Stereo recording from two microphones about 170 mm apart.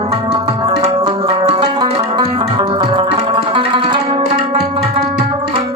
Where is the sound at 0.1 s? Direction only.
35° right (ahead or behind).